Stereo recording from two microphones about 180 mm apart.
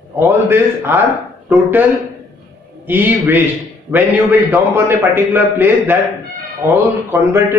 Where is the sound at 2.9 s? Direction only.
10° right (ahead or behind).